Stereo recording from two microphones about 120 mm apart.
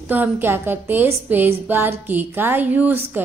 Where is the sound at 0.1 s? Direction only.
15° right (ahead or behind).